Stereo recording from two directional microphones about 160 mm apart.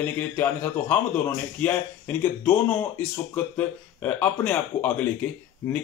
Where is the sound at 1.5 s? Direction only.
10° left (ahead or behind).